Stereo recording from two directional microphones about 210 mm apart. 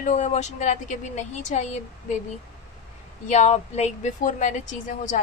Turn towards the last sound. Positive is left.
turn(degrees=35)  # may be behind; listen again after turning